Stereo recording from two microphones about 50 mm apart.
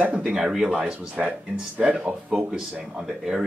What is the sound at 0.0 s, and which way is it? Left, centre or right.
Speech, right.